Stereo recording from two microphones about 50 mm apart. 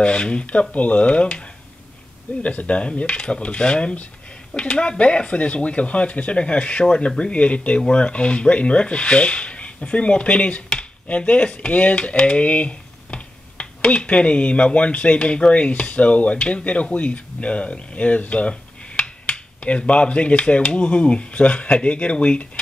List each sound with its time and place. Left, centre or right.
0.0 s speech: left
2.4 s speech: left